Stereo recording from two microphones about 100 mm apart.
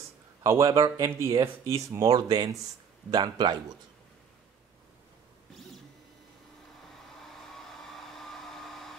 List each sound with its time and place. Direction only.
0.4 s a man's voice: 35° right (ahead or behind)
7.2 s hair dryer: 5° left (ahead or behind)